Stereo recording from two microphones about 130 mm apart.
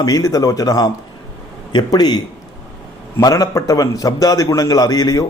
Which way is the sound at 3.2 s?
30° left (ahead or behind).